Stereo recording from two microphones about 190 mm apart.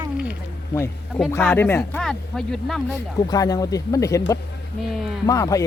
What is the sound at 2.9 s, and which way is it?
Speech, 20° left (ahead or behind).